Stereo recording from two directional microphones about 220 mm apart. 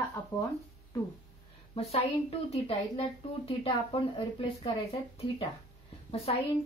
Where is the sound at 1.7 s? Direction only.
25° left (ahead or behind).